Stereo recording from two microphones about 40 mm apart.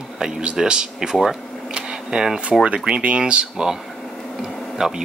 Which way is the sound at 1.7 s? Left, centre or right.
Right.